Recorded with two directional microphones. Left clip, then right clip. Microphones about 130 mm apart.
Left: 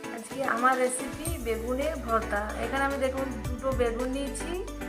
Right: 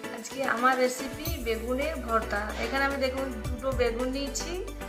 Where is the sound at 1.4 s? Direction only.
15° left (ahead or behind).